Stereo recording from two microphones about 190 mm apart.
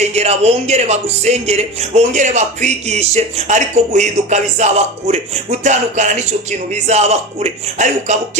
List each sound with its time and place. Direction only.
0.0 s speech: 35° right (ahead or behind)